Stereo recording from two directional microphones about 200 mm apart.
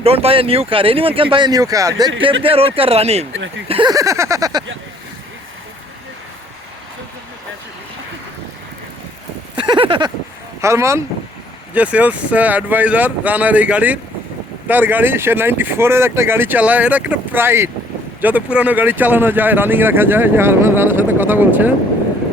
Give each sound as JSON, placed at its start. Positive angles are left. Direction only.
{"t": 0.0, "sound": "speech", "side_deg": -30}
{"t": 2.4, "sound": "speech", "side_deg": -30}
{"t": 9.6, "sound": "a sound", "side_deg": -25}
{"t": 10.6, "sound": "speech", "side_deg": -15}